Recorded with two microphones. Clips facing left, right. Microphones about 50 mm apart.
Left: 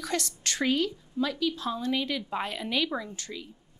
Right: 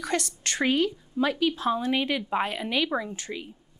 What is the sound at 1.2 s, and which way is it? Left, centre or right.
Speech, right.